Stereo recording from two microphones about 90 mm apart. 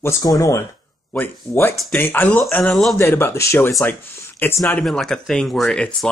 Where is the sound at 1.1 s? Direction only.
20° left (ahead or behind).